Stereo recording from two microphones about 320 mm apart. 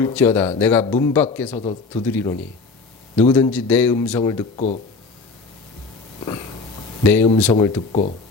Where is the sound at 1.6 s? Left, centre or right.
Centre.